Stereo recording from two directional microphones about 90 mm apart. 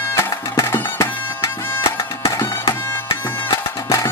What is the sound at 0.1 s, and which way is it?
Music, 30° left (ahead or behind).